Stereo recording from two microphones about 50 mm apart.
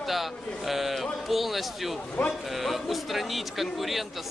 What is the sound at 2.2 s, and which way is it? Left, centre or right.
Speech, left.